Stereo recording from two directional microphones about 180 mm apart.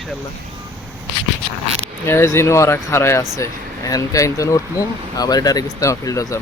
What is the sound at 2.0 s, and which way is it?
Speech, 15° left (ahead or behind).